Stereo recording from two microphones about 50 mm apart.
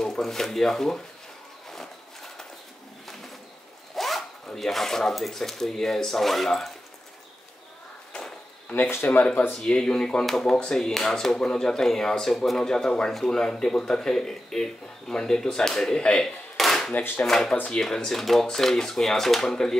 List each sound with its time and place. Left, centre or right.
0.0 s speech: centre
1.7 s a sound: centre
3.9 s speech: centre
8.1 s a sound: centre
8.9 s speech: left
9.5 s speech: centre
10.2 s speech: centre
10.5 s speech: centre
10.8 s speech: centre
16.5 s a sound: centre
17.6 s speech: centre